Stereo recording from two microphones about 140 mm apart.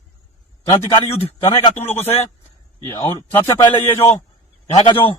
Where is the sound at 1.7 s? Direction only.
15° left (ahead or behind).